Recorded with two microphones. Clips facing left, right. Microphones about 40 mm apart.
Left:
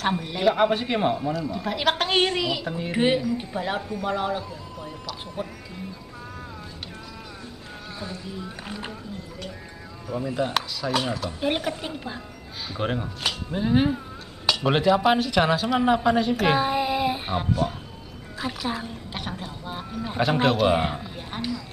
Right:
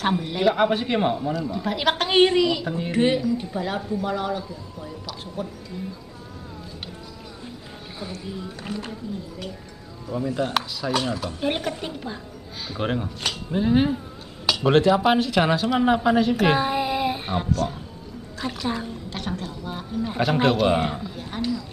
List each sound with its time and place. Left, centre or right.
0.0 s speech: centre
2.3 s a man's voice: centre
5.4 s speech: left
8.7 s speech: centre
10.1 s a man's voice: centre
12.6 s speech: centre
17.5 s a man's voice: centre
18.4 s speech: centre
19.0 s a man's voice: centre